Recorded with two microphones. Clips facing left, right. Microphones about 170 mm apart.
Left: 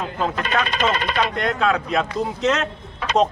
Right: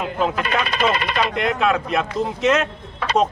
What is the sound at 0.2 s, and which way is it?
A man's voice, 10° right (ahead or behind).